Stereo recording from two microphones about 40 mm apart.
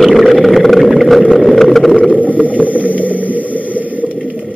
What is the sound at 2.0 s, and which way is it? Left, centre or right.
Vehicle, left.